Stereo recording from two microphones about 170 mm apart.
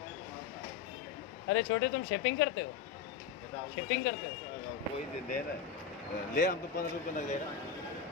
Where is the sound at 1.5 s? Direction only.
90° left.